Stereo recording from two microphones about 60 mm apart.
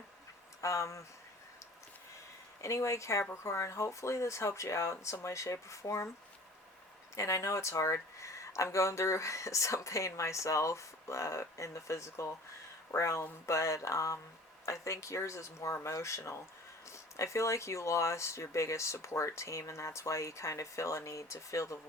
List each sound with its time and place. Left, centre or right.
0.6 s speech: left
2.6 s speech: left
7.2 s speech: left